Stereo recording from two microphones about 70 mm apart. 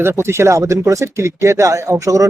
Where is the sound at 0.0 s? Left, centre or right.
Right.